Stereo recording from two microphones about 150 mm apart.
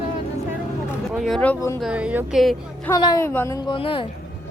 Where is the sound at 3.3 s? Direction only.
15° left (ahead or behind).